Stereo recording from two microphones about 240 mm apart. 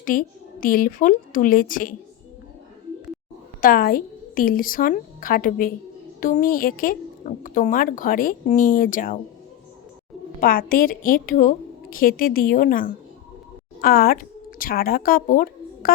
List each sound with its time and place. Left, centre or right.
0.0 s speech: left
3.6 s speech: left
10.4 s a woman's voice: left